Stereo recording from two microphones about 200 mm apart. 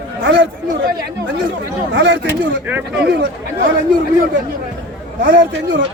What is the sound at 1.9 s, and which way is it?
Speech, 65° right (ahead or behind).